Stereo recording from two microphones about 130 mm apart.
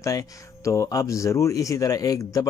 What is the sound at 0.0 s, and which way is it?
Speech, 25° left (ahead or behind).